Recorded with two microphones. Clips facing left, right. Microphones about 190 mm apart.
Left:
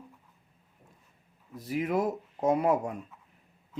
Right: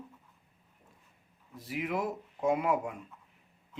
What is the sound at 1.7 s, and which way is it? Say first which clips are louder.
Speech: left 5 dB; 40° left (ahead or behind).